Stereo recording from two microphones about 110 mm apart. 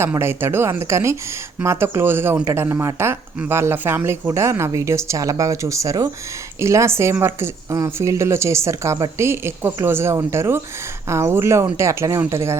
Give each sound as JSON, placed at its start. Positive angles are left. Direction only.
{"t": 0.0, "sound": "speech", "side_deg": -20}